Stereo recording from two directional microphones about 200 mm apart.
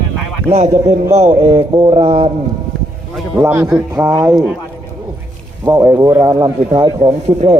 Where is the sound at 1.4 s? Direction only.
25° right (ahead or behind).